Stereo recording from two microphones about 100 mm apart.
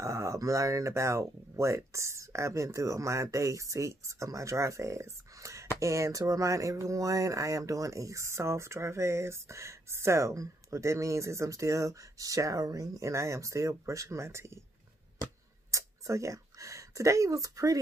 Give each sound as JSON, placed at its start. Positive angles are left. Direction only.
{"t": 0.0, "sound": "speech", "side_deg": -30}
{"t": 15.7, "sound": "speech", "side_deg": -30}